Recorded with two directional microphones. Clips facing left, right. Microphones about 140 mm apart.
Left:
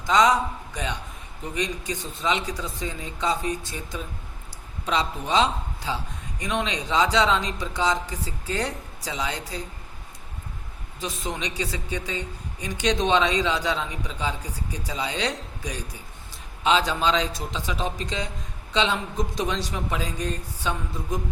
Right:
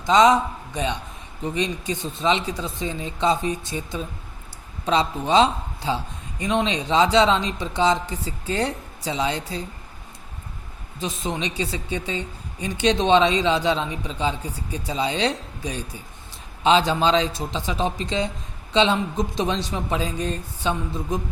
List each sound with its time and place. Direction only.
0.1 s a woman's voice: 25° right (ahead or behind)
11.0 s a woman's voice: 25° right (ahead or behind)